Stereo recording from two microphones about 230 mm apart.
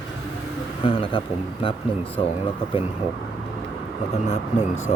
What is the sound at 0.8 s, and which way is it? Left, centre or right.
Speech, left.